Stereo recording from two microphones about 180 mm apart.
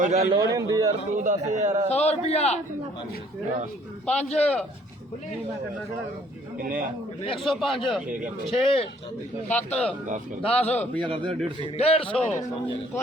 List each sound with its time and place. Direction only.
0.0 s a man's voice: 40° right (ahead or behind)
0.3 s a man's voice: 20° right (ahead or behind)
1.2 s a man's voice: 40° right (ahead or behind)
2.0 s a man's voice: 35° left (ahead or behind)
4.0 s a man's voice: 5° left (ahead or behind)
6.6 s a man's voice: 50° right (ahead or behind)
7.4 s a man's voice: centre (ahead or behind)
8.4 s a man's voice: 30° left (ahead or behind)
9.5 s a man's voice: 10° left (ahead or behind)
10.4 s a man's voice: 35° left (ahead or behind)
10.9 s a man's voice: 30° right (ahead or behind)
11.8 s a man's voice: 30° left (ahead or behind)